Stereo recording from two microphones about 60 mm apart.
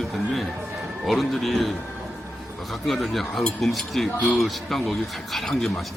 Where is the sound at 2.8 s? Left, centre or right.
Centre.